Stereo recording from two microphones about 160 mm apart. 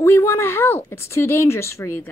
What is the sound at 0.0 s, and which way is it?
Speech, 15° left (ahead or behind).